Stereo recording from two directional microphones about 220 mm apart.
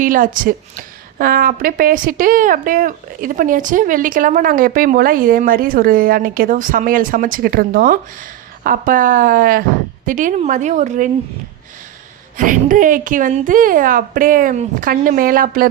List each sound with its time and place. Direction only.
0.0 s a woman's voice: 40° right (ahead or behind)
12.4 s a woman's voice: 35° right (ahead or behind)